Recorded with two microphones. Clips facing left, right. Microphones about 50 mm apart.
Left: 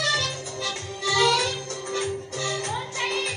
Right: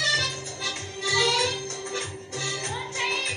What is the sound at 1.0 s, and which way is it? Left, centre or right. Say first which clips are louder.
Music: left 3 dB; left.